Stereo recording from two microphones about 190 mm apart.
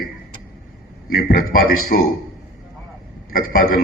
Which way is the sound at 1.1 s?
50° left (ahead or behind).